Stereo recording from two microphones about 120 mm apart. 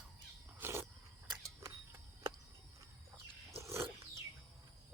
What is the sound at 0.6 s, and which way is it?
Cricket, 20° right (ahead or behind).